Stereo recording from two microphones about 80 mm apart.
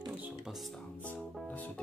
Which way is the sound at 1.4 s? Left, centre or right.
Centre.